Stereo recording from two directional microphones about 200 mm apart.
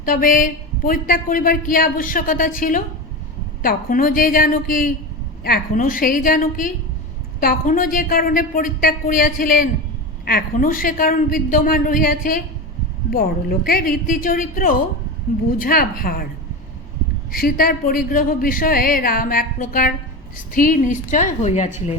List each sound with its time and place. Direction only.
0.0 s a woman's voice: 45° left (ahead or behind)
17.3 s a woman's voice: 45° left (ahead or behind)